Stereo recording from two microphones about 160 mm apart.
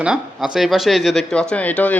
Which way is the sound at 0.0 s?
5° right (ahead or behind).